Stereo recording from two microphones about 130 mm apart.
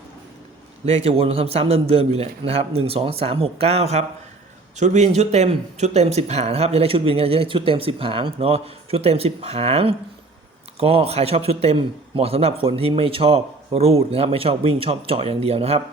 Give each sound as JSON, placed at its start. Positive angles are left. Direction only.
{"t": 0.9, "sound": "a man's voice", "side_deg": -50}
{"t": 4.8, "sound": "a man's voice", "side_deg": -65}